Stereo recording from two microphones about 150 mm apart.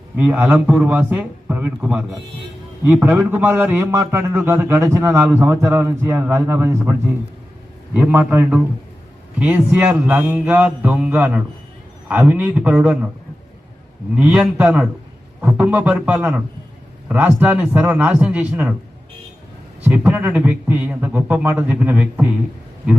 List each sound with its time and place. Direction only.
0.2 s a man's voice: 10° right (ahead or behind)
7.9 s a man's voice: 10° right (ahead or behind)
14.2 s a man's voice: 10° right (ahead or behind)
19.8 s a man's voice: 10° right (ahead or behind)